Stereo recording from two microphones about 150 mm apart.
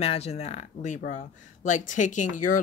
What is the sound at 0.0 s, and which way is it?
Speech, 45° left (ahead or behind).